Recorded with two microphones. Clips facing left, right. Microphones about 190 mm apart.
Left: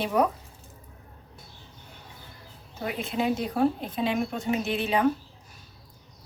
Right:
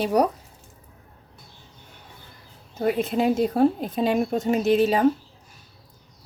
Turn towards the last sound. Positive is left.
turn(degrees=-40)  # may be behind; listen again after turning